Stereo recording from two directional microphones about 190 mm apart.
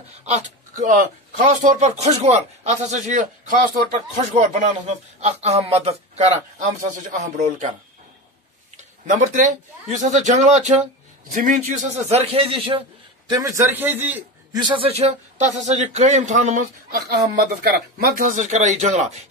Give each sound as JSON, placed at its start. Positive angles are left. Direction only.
{"t": 0.2, "sound": "a man's voice", "side_deg": -40}
{"t": 9.0, "sound": "a man's voice", "side_deg": -40}
{"t": 13.3, "sound": "a man's voice", "side_deg": -15}
{"t": 14.6, "sound": "a man's voice", "side_deg": -25}
{"t": 17.1, "sound": "a man's voice", "side_deg": -55}